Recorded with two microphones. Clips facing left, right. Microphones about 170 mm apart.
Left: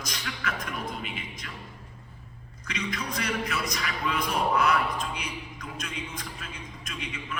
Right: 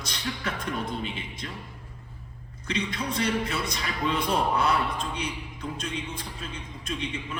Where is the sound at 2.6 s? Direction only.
30° right (ahead or behind).